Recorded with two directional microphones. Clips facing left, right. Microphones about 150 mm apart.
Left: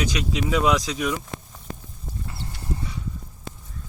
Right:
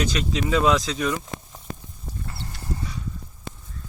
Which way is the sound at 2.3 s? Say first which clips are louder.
Left 1 dB; 20° left (ahead or behind).